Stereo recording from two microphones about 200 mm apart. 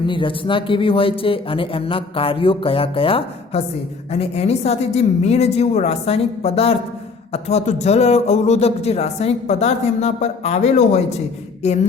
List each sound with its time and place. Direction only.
0.0 s speech: 25° left (ahead or behind)